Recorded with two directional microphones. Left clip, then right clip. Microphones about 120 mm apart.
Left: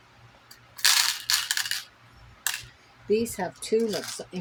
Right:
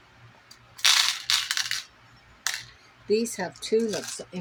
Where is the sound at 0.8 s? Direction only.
25° left (ahead or behind).